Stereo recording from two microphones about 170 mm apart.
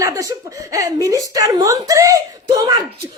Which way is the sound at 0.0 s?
20° right (ahead or behind).